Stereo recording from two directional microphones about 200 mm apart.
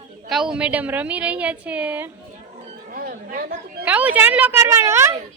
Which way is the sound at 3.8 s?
10° right (ahead or behind).